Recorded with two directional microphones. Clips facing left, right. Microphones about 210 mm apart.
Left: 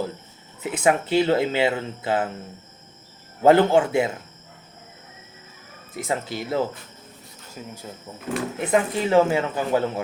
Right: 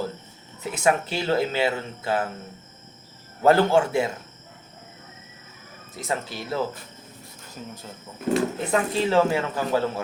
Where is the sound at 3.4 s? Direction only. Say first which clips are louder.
Left 2 dB; 20° left (ahead or behind).